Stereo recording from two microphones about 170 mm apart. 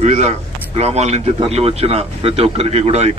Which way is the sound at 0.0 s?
40° right (ahead or behind).